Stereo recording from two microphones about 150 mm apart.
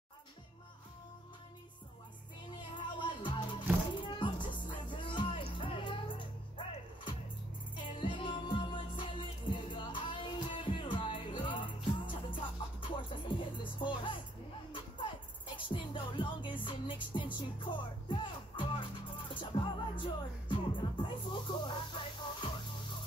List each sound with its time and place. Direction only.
2.7 s music: 30° left (ahead or behind)
7.7 s music: 35° left (ahead or behind)